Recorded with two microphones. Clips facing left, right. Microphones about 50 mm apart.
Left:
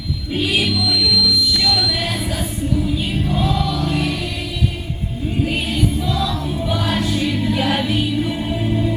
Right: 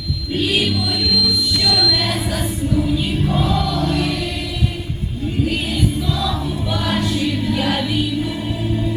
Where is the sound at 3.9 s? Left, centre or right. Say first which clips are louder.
Right 1 dB; centre.